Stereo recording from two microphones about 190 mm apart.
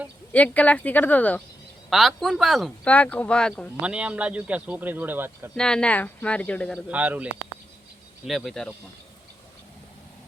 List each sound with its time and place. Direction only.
0.3 s speech: 10° left (ahead or behind)
3.8 s a man's voice: 5° right (ahead or behind)
5.5 s speech: 5° left (ahead or behind)
6.8 s a man's voice: 5° right (ahead or behind)